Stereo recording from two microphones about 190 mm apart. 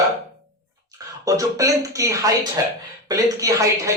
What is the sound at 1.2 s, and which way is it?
A man's voice, 15° right (ahead or behind).